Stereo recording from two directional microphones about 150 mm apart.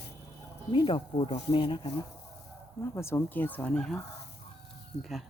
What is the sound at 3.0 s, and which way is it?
Speech, 20° left (ahead or behind).